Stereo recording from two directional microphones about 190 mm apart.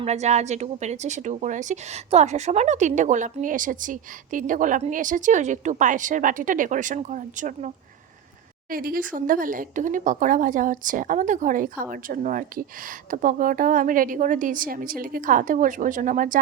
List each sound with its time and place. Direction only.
0.0 s speech: 35° right (ahead or behind)
8.7 s speech: 50° right (ahead or behind)